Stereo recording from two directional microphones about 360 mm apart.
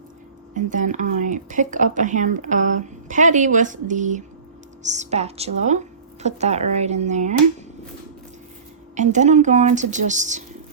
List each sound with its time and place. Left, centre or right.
0.5 s speech: right
9.0 s speech: centre